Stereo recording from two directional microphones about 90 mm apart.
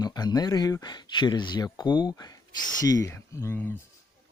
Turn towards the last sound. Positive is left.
turn(degrees=30)  # may be behind; listen again after turning